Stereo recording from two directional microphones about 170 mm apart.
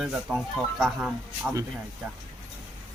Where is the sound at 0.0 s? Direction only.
5° right (ahead or behind).